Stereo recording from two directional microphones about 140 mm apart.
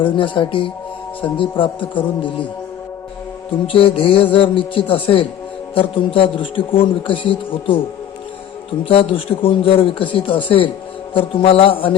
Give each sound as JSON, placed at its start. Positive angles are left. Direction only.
{"t": 0.0, "sound": "a man's voice", "side_deg": 35}
{"t": 3.7, "sound": "a man's voice", "side_deg": 40}
{"t": 8.8, "sound": "a man's voice", "side_deg": 40}